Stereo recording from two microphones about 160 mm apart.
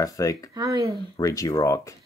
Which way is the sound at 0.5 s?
20° right (ahead or behind).